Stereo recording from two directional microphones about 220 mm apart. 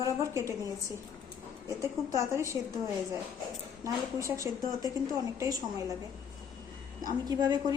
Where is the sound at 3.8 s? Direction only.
15° right (ahead or behind).